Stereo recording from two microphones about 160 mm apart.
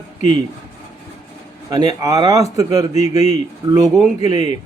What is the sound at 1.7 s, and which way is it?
A man's voice, 25° right (ahead or behind).